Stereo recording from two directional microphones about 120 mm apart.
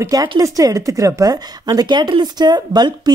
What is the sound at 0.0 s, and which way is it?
A woman's voice, 30° right (ahead or behind).